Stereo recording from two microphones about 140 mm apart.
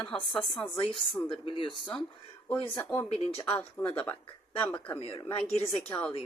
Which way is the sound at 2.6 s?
15° left (ahead or behind).